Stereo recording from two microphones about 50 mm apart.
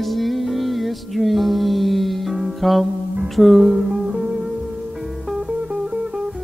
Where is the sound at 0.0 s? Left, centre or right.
Centre.